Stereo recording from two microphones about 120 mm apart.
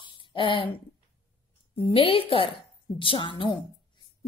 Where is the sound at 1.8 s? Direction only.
50° left (ahead or behind).